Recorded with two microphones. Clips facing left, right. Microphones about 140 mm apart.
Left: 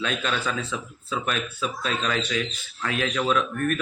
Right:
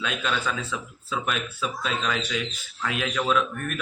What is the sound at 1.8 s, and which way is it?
Speech, 5° right (ahead or behind).